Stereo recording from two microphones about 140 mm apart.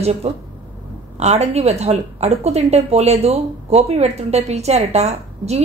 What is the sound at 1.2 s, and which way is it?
A woman's voice, 50° right (ahead or behind).